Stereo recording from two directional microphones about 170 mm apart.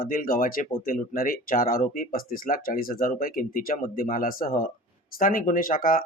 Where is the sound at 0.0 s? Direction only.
55° left (ahead or behind).